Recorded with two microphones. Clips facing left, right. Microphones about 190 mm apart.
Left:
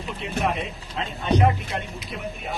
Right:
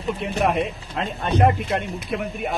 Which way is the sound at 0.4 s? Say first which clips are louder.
Right 6 dB; 55° right (ahead or behind).